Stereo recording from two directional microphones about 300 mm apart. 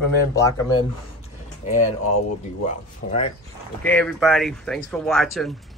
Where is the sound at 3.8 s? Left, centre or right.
Centre.